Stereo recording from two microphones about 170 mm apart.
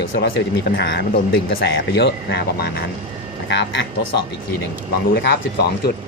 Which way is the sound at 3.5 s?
90° left.